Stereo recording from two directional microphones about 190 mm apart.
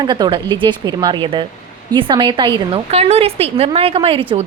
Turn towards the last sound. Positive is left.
turn(degrees=-30)  # may be behind; listen again after turning